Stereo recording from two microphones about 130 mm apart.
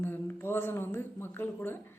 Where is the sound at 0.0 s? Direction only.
15° left (ahead or behind).